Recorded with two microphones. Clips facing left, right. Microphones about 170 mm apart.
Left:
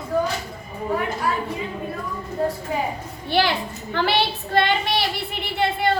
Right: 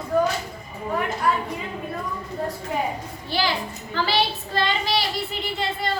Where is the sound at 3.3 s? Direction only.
60° left (ahead or behind).